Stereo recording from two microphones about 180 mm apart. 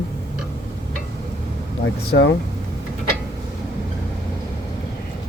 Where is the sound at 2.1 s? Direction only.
75° left (ahead or behind).